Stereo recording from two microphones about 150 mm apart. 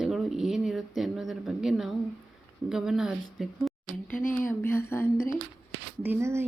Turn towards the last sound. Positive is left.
turn(degrees=-15)  # may be behind; listen again after turning